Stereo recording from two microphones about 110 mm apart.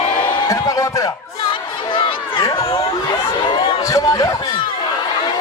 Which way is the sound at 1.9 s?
55° left (ahead or behind).